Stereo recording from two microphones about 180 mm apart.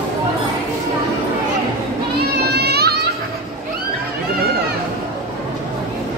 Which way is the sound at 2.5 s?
65° right (ahead or behind).